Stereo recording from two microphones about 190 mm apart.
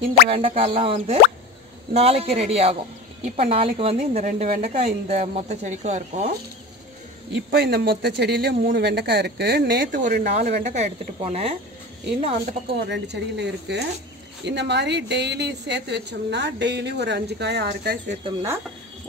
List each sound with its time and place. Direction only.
0.3 s a woman's voice: 30° right (ahead or behind)
7.5 s a woman's voice: 55° right (ahead or behind); by 12.5 s 30° right (ahead or behind)
12.7 s a woman's voice: 60° right (ahead or behind)
18.2 s speech: 15° right (ahead or behind)